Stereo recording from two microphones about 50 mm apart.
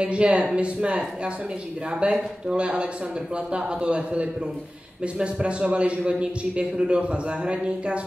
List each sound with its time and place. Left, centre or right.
0.0 s speech: right